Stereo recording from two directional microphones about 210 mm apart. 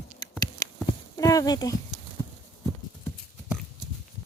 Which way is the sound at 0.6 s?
15° left (ahead or behind).